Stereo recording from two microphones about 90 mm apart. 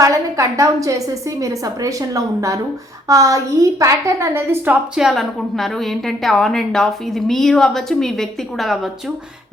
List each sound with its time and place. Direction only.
0.0 s a woman's voice: 35° right (ahead or behind)
4.9 s a woman's voice: 5° right (ahead or behind)